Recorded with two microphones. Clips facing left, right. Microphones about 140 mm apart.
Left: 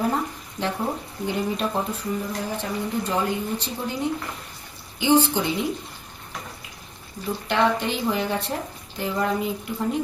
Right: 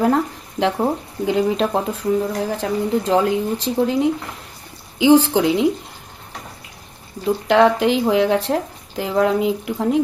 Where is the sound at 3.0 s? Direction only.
90° right.